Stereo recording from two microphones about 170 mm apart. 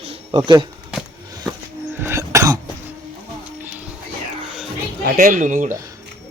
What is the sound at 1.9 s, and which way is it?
Throat clearing, 15° right (ahead or behind).